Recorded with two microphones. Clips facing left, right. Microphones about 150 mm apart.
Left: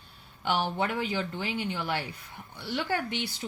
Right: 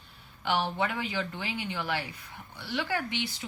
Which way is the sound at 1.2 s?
40° left (ahead or behind).